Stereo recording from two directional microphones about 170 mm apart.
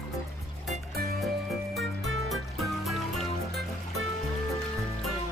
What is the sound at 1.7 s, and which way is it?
Music, centre (ahead or behind).